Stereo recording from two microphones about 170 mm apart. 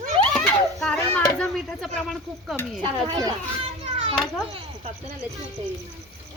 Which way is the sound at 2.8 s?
25° right (ahead or behind).